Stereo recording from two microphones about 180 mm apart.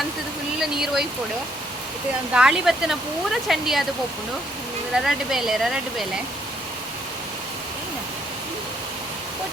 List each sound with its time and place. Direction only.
0.6 s a sound: centre (ahead or behind)
2.3 s speech: 5° right (ahead or behind)
4.9 s speech: centre (ahead or behind)